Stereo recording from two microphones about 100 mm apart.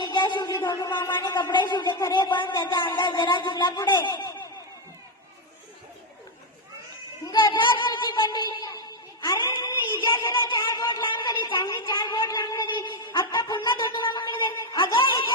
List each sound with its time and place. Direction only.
0.0 s a sound: 50° left (ahead or behind)
1.2 s speech: 45° left (ahead or behind)
7.3 s child singing: 50° left (ahead or behind)
9.2 s a woman's voice: 45° left (ahead or behind)